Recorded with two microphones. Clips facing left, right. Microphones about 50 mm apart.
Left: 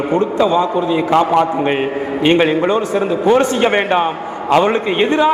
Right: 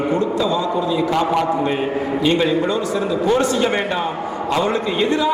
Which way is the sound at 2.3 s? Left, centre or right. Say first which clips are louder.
Left 6 dB; left.